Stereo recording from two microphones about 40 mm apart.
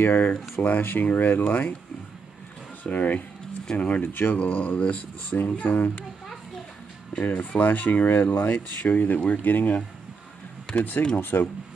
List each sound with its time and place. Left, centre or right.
0.1 s speech: left
2.8 s speech: left
7.2 s speech: left
8.2 s speech: left
10.8 s speech: left
11.1 s speech: left